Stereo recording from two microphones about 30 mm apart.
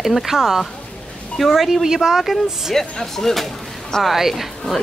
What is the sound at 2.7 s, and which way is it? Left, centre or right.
Speech, centre.